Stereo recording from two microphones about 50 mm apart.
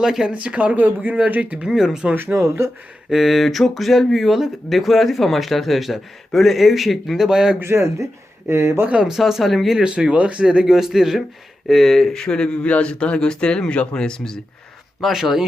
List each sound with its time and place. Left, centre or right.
0.0 s speech: centre
1.6 s speech: centre
2.3 s speech: right
3.1 s speech: centre
7.2 s speech: centre
7.6 s speech: right
9.0 s speech: centre
9.7 s speech: centre
10.8 s speech: centre
15.1 s speech: centre